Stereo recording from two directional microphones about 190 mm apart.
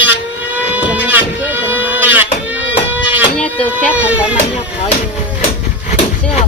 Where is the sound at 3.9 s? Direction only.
5° right (ahead or behind).